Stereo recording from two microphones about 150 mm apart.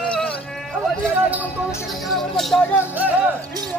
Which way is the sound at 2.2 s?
Centre (ahead or behind).